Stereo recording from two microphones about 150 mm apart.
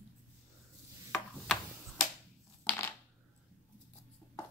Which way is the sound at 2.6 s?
10° left (ahead or behind).